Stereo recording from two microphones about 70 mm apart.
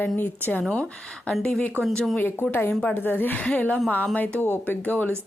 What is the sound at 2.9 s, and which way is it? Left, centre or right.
Speech, left.